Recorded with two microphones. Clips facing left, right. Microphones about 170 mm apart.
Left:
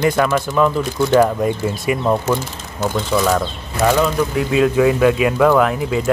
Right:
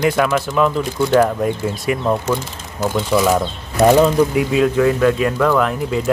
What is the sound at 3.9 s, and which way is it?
Speech, 30° right (ahead or behind).